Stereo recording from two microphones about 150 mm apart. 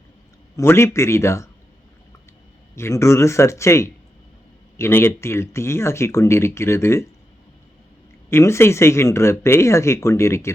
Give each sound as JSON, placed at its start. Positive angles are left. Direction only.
{"t": 0.5, "sound": "speech", "side_deg": 15}
{"t": 2.7, "sound": "a man's voice", "side_deg": 20}
{"t": 8.3, "sound": "speech", "side_deg": 15}